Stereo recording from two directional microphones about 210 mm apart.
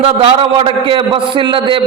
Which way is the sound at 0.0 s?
25° right (ahead or behind).